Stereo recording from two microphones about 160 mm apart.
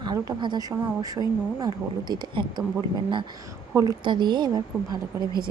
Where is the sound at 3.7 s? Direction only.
20° right (ahead or behind).